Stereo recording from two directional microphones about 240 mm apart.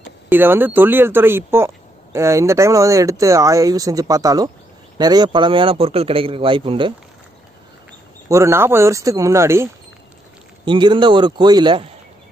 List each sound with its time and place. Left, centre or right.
0.3 s a man's voice: centre
8.3 s a man's voice: centre